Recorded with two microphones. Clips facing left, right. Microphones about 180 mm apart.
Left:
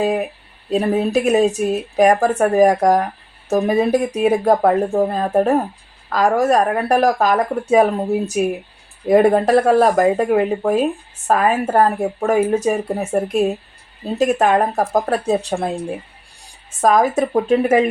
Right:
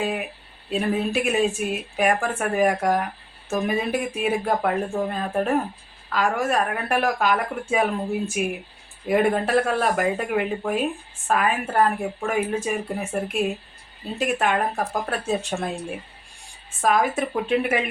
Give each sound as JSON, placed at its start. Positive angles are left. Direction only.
{"t": 0.0, "sound": "speech", "side_deg": 40}